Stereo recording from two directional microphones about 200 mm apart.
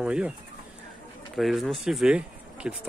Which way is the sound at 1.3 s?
Centre (ahead or behind).